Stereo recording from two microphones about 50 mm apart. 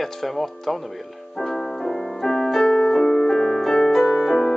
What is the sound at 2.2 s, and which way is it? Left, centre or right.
Keyboard, centre.